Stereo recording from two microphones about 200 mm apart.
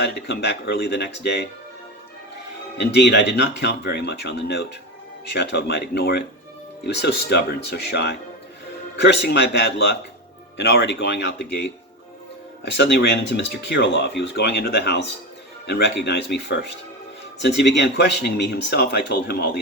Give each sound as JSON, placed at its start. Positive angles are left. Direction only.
{"t": 0.0, "sound": "speech", "side_deg": 55}
{"t": 2.7, "sound": "speech", "side_deg": 55}
{"t": 12.7, "sound": "speech", "side_deg": 60}